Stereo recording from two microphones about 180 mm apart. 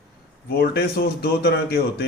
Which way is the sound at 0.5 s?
60° left (ahead or behind).